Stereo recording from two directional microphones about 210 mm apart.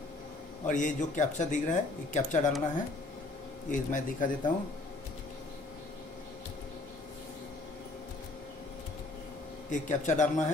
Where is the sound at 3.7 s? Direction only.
40° left (ahead or behind).